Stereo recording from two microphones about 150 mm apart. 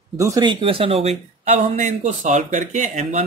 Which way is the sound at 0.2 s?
25° right (ahead or behind).